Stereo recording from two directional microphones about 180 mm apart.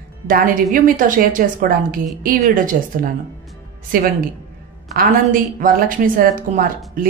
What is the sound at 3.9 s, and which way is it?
A woman's voice, 50° right (ahead or behind).